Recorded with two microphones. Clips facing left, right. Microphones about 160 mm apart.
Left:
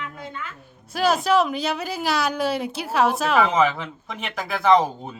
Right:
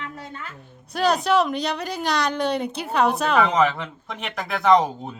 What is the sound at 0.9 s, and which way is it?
A woman's voice, centre (ahead or behind).